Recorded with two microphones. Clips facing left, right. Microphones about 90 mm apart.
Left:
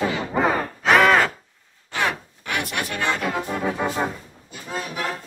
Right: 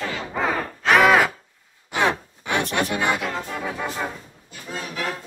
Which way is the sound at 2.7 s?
20° right (ahead or behind).